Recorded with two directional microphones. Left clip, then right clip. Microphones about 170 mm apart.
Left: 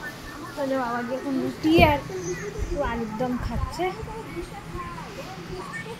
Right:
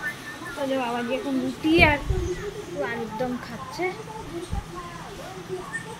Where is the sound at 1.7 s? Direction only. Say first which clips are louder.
Even; 10° left (ahead or behind).